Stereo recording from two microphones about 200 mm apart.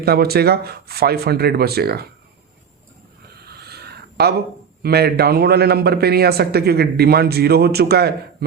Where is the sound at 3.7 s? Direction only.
55° right (ahead or behind).